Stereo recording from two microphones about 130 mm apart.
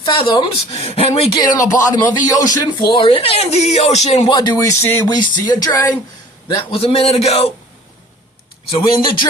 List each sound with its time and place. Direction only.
0.0 s speech: 40° left (ahead or behind)
1.4 s speech: 30° left (ahead or behind); by 4.3 s 55° left (ahead or behind)
4.3 s speech: 35° left (ahead or behind)
4.5 s speech: 20° left (ahead or behind)
6.6 s speech: 45° left (ahead or behind)
8.7 s speech: 35° left (ahead or behind)